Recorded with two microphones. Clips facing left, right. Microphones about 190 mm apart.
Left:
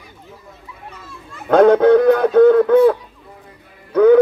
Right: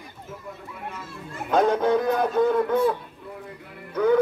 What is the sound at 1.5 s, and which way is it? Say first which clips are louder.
A man's voice: left 10 dB; 65° left (ahead or behind).